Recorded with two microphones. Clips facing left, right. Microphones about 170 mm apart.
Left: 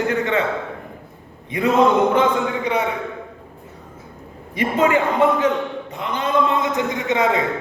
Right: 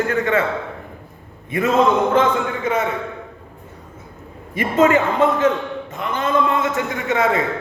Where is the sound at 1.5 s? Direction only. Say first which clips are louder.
Even; 15° left (ahead or behind).